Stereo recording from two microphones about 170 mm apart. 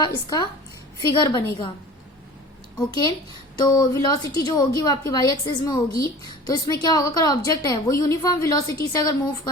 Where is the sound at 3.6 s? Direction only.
25° left (ahead or behind).